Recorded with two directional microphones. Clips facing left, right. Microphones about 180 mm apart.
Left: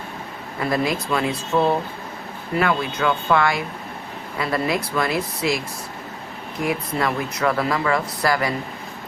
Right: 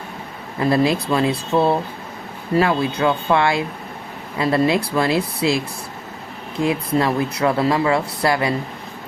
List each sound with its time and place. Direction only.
0.7 s speech: 30° right (ahead or behind)